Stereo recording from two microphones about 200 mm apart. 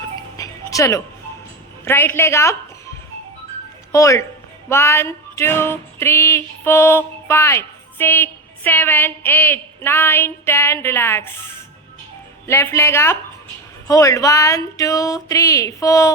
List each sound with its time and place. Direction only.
0.3 s music: 15° left (ahead or behind)
3.9 s music: 15° left (ahead or behind)